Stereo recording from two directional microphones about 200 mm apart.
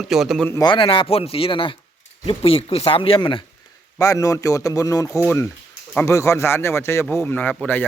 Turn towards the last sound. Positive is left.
turn(degrees=5)  # may be behind; listen again after turning